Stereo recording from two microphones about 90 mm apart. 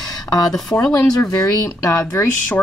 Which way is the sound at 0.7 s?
30° left (ahead or behind).